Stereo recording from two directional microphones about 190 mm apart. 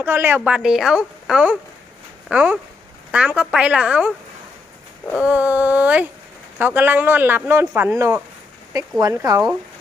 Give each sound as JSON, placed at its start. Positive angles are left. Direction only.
{"t": 0.0, "sound": "a woman's voice", "side_deg": -10}
{"t": 5.1, "sound": "speech", "side_deg": -5}